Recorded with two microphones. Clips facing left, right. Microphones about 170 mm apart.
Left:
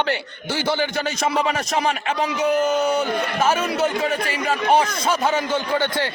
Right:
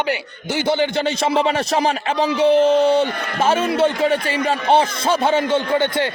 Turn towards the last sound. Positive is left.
turn(degrees=-25)  # may be behind; listen again after turning